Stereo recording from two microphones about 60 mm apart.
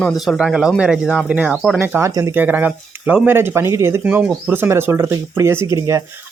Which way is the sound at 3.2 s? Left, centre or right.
Right.